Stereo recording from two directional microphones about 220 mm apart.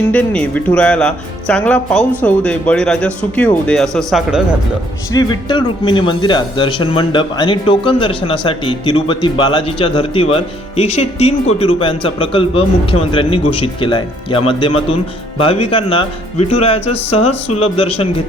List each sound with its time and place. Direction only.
0.1 s speech: 5° left (ahead or behind)
5.1 s speech: 20° left (ahead or behind)